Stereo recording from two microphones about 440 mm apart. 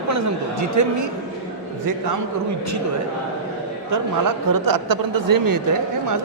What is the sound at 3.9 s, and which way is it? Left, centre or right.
Speech, right.